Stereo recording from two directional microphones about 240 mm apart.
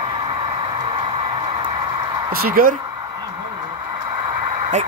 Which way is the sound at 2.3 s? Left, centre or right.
Right.